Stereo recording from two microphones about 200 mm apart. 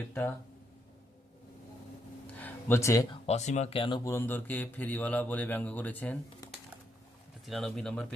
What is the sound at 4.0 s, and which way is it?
Speech, 15° left (ahead or behind).